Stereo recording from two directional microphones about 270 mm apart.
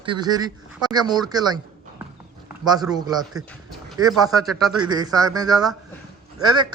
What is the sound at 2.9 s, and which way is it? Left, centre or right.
Speech, centre.